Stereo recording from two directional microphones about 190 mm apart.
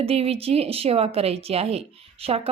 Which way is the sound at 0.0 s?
30° right (ahead or behind).